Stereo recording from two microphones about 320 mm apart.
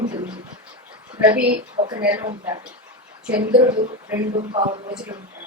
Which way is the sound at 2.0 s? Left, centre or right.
Centre.